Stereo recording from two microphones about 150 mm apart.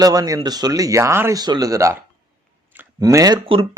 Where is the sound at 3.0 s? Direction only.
25° right (ahead or behind).